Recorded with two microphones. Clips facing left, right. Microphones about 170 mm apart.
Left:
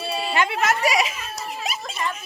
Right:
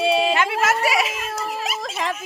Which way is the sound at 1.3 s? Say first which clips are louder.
Right 5 dB; 50° right (ahead or behind).